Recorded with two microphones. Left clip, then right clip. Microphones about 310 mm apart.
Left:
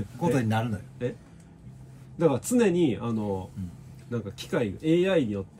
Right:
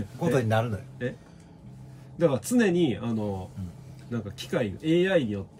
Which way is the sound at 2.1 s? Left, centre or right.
Centre.